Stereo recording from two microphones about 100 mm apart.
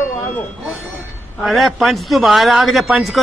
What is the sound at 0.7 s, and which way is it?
Speech, centre (ahead or behind).